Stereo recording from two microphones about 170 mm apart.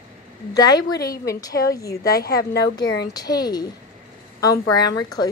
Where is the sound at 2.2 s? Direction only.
65° left (ahead or behind).